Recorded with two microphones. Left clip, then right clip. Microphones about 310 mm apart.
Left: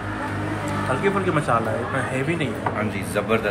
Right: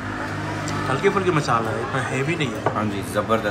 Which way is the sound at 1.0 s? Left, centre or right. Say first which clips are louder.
Right 4 dB; centre.